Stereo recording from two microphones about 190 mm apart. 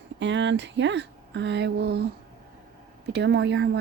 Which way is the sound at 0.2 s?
70° right (ahead or behind).